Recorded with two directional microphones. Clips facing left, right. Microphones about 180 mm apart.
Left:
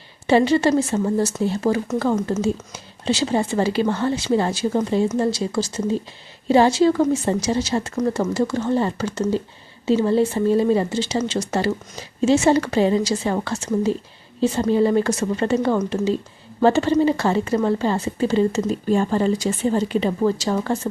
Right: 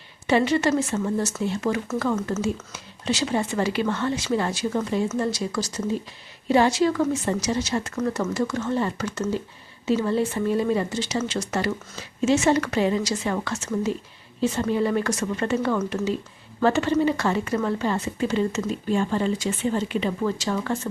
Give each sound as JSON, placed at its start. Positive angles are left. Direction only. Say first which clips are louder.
{"t": 0.3, "sound": "a woman's voice", "louder": "left 4 dB", "side_deg": 30}